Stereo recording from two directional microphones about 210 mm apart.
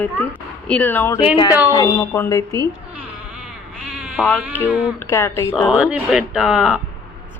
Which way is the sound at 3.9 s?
5° right (ahead or behind).